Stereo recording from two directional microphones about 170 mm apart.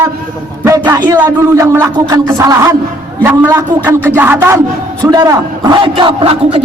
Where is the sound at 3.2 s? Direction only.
15° right (ahead or behind).